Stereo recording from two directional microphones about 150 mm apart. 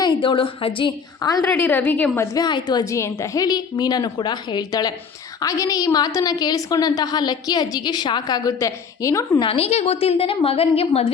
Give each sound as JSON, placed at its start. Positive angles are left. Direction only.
{"t": 0.0, "sound": "a woman's voice", "side_deg": 35}
{"t": 1.2, "sound": "a woman's voice", "side_deg": 25}
{"t": 1.5, "sound": "a woman's voice", "side_deg": 15}
{"t": 9.4, "sound": "a woman's voice", "side_deg": 40}